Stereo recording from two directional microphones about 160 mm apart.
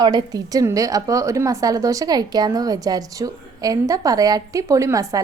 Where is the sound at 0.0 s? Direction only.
25° right (ahead or behind).